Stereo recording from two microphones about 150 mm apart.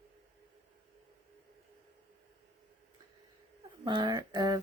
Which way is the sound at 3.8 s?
30° right (ahead or behind).